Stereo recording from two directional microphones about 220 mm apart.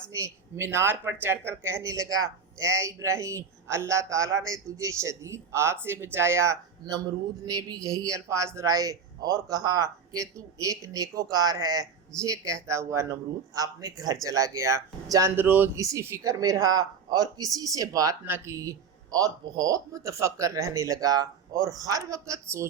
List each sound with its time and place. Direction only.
0.1 s a man's voice: 10° right (ahead or behind)